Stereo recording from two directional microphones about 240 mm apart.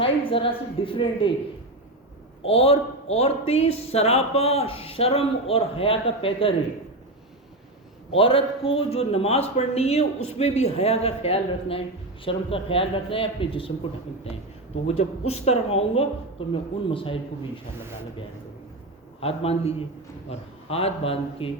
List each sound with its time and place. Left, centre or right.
0.0 s a man's voice: left
2.4 s a man's voice: left
8.1 s a man's voice: left
19.2 s a man's voice: left